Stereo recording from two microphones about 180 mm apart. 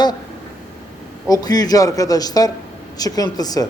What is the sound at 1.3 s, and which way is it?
Speech, 20° left (ahead or behind).